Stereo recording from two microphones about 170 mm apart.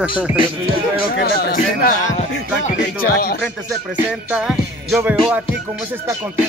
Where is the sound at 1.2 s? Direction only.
60° left (ahead or behind).